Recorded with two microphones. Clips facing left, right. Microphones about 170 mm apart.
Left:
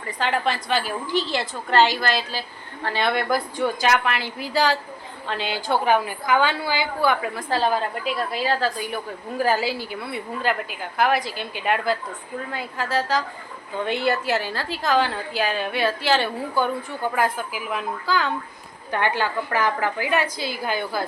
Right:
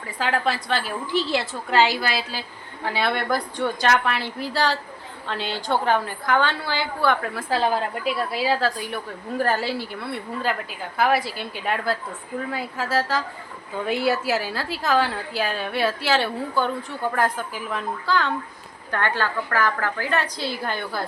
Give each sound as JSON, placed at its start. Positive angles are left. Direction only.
{"t": 0.0, "sound": "a woman's voice", "side_deg": 0}
{"t": 8.3, "sound": "a woman's voice", "side_deg": -5}
{"t": 16.6, "sound": "a woman's voice", "side_deg": 10}
{"t": 18.9, "sound": "a woman's voice", "side_deg": 15}